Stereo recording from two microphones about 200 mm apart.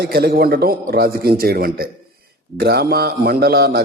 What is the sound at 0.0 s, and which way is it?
A man's voice, 50° right (ahead or behind).